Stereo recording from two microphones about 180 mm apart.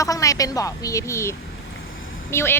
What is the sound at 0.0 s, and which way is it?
A woman's voice, 20° left (ahead or behind).